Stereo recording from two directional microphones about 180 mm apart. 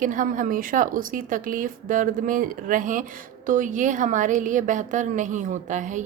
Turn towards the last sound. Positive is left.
turn(degrees=-45)  # may be behind; listen again after turning